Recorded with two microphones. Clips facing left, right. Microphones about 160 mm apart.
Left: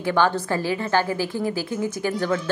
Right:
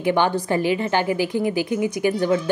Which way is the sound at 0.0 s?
20° right (ahead or behind).